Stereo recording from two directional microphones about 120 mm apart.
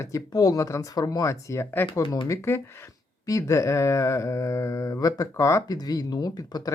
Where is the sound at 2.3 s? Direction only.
20° left (ahead or behind).